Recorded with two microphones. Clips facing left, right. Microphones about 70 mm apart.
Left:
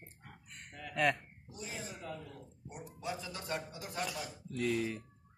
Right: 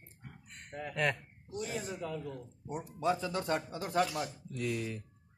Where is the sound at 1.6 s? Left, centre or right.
Right.